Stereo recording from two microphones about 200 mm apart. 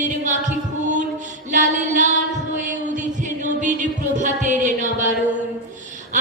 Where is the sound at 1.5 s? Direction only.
40° right (ahead or behind).